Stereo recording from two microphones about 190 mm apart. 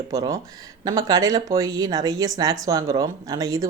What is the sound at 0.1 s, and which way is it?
Speech, 15° right (ahead or behind).